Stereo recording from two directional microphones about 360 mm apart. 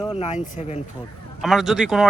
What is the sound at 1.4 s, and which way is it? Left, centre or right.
Speech, centre.